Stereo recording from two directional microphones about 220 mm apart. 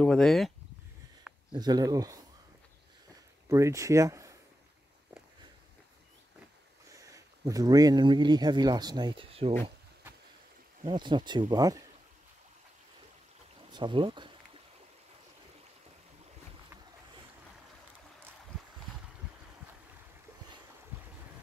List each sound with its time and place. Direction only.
0.0 s speech: 5° left (ahead or behind)
1.5 s speech: 20° right (ahead or behind)
3.4 s speech: 15° right (ahead or behind)
6.9 s speech: 15° right (ahead or behind)
10.9 s speech: 20° right (ahead or behind)
13.7 s speech: 20° right (ahead or behind)